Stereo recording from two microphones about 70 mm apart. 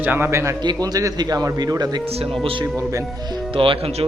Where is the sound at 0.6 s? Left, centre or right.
Right.